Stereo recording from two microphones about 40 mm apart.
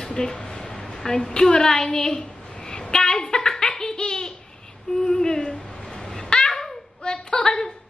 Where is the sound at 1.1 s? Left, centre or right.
Centre.